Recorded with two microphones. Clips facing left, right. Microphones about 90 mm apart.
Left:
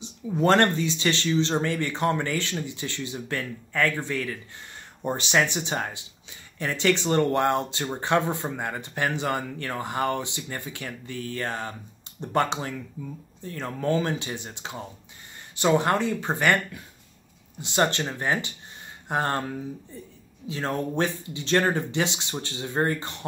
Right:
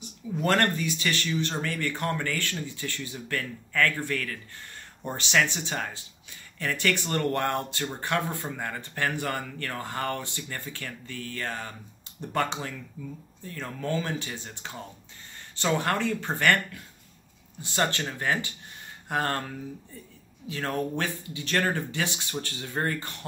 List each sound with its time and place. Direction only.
0.0 s speech: 25° left (ahead or behind)